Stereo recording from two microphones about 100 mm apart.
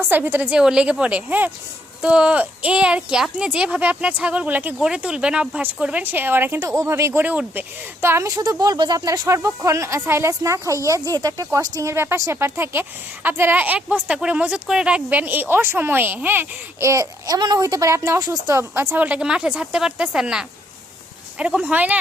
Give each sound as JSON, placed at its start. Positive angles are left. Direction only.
{"t": 0.1, "sound": "speech", "side_deg": -20}
{"t": 6.6, "sound": "speech", "side_deg": -30}
{"t": 8.4, "sound": "speech", "side_deg": -40}